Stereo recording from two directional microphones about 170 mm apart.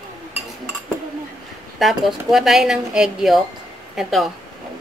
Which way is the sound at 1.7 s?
Centre (ahead or behind).